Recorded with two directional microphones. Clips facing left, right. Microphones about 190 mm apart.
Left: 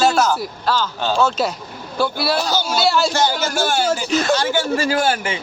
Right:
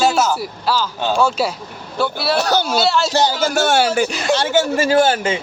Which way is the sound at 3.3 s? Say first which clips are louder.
Right 4 dB; 60° right (ahead or behind).